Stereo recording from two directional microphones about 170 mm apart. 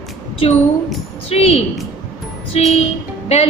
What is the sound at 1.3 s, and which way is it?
A woman's voice, 35° left (ahead or behind).